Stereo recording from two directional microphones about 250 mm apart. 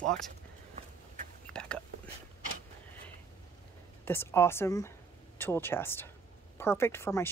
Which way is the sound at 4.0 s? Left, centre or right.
Centre.